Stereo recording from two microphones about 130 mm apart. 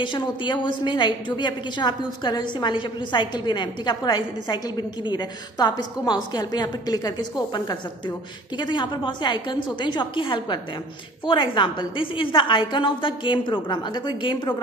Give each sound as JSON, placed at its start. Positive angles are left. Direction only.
{"t": 0.0, "sound": "a woman's voice", "side_deg": 40}